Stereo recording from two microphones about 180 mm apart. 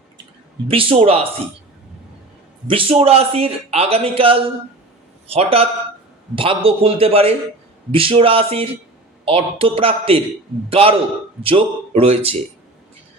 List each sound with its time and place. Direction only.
0.7 s speech: 30° right (ahead or behind)
2.6 s speech: 30° right (ahead or behind)